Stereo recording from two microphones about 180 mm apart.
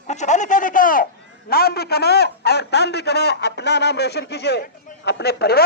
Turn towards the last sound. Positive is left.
turn(degrees=60)  # may be behind; listen again after turning